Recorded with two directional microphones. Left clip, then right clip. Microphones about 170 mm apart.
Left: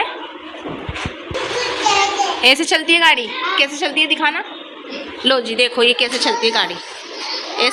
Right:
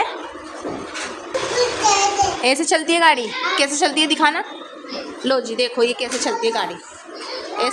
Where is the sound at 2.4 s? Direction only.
10° right (ahead or behind).